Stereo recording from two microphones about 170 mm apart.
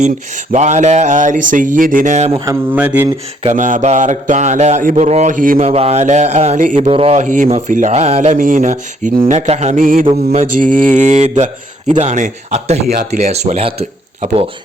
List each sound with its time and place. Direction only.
0.5 s speech: 45° right (ahead or behind)
2.7 s speech: 10° right (ahead or behind)
3.4 s speech: 50° right (ahead or behind)
5.6 s speech: 40° right (ahead or behind)
6.8 s speech: 35° right (ahead or behind); by 9.3 s 50° right (ahead or behind)
9.3 s speech: 40° right (ahead or behind)
10.1 s speech: 40° right (ahead or behind)